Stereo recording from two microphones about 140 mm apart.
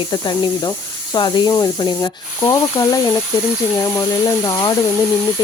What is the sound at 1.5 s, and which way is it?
Sizzle, 30° left (ahead or behind).